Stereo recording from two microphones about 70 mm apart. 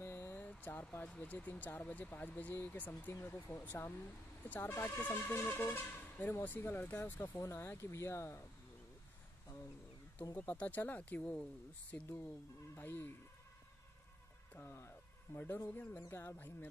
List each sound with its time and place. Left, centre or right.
0.0 s vehicle: left
0.4 s speech: left
10.3 s speech: left
14.5 s speech: left